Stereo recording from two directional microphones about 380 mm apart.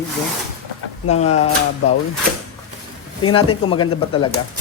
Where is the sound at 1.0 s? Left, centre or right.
Centre.